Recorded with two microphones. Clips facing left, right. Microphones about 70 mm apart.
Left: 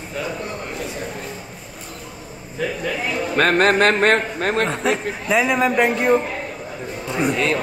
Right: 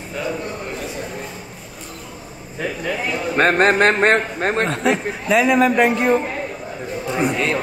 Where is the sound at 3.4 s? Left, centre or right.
Right.